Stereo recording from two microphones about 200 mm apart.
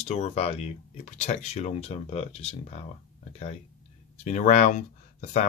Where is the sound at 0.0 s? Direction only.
35° left (ahead or behind).